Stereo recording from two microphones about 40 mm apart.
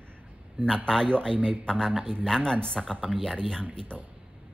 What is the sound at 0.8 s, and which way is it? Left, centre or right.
Speech, centre.